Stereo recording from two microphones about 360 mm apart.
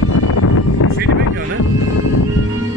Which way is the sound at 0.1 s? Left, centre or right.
Left.